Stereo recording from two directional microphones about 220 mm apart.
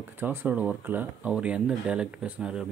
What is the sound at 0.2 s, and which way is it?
Speech, 10° right (ahead or behind).